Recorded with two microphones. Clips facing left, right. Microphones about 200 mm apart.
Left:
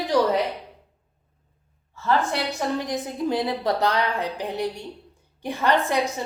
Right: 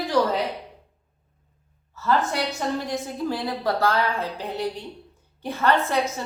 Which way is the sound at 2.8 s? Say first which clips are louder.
Left 1 dB; 20° left (ahead or behind).